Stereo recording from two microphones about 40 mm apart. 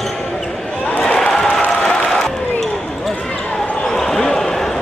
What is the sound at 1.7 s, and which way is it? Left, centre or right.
Applause, centre.